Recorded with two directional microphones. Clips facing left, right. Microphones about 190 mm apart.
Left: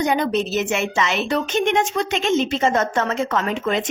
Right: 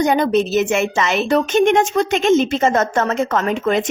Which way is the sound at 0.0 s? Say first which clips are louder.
Right 4 dB; 45° right (ahead or behind).